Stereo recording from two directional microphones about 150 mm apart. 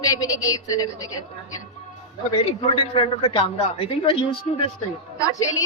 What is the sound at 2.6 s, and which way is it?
Speech, 35° left (ahead or behind).